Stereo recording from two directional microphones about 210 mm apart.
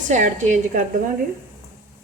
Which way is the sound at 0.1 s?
35° right (ahead or behind).